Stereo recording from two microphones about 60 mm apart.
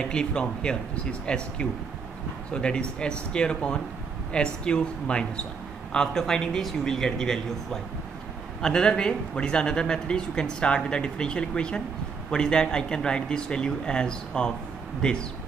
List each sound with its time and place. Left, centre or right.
0.0 s a man's voice: centre